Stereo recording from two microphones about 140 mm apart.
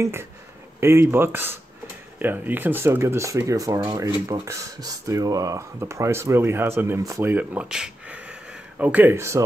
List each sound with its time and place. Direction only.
0.0 s speech: 20° right (ahead or behind)